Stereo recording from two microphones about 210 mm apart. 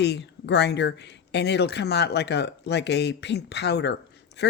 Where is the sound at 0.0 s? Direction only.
55° left (ahead or behind).